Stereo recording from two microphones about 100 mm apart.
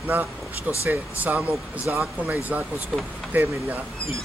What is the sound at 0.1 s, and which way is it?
Speech, 20° right (ahead or behind).